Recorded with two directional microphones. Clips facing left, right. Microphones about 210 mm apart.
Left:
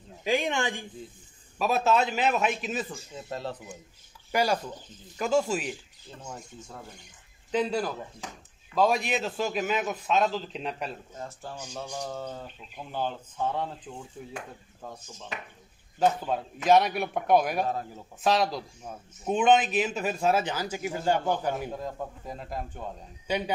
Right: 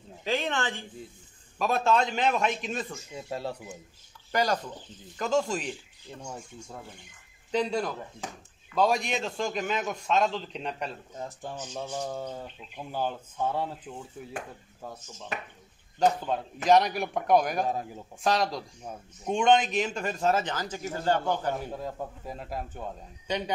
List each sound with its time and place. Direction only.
0.2 s a man's voice: 10° left (ahead or behind)
3.2 s speech: 10° right (ahead or behind)
4.3 s a man's voice: 10° left (ahead or behind)
6.2 s speech: 10° right (ahead or behind)
7.5 s a man's voice: 5° left (ahead or behind)
12.0 s speech: 10° right (ahead or behind)
15.3 s speech: 55° right (ahead or behind)
16.0 s a man's voice: 5° left (ahead or behind)
17.6 s speech: 15° right (ahead or behind)
18.2 s a man's voice: centre (ahead or behind)
21.7 s a man's voice: 5° right (ahead or behind)
23.2 s speech: 10° left (ahead or behind)